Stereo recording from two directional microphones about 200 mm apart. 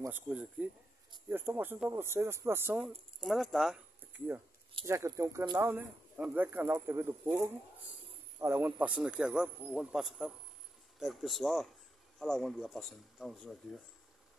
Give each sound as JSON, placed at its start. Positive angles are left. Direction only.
{"t": 0.0, "sound": "a man's voice", "side_deg": -10}
{"t": 4.8, "sound": "a man's voice", "side_deg": -15}